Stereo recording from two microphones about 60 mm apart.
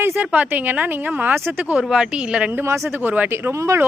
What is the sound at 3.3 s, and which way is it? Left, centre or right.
Speech, right.